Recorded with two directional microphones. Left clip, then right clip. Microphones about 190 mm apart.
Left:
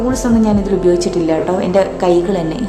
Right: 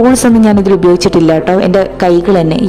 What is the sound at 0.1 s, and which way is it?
A woman's voice, 45° right (ahead or behind).